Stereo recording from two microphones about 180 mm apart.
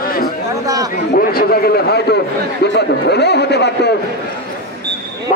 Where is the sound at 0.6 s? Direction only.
20° right (ahead or behind).